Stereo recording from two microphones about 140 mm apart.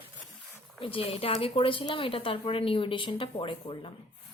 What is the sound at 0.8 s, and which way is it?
Speech, 40° left (ahead or behind).